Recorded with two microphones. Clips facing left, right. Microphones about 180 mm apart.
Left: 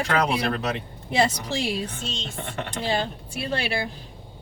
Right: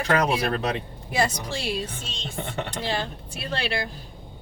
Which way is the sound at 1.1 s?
25° left (ahead or behind).